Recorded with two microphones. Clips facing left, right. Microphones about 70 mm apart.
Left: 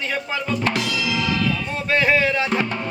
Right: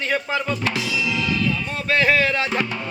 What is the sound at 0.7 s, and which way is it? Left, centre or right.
Music, left.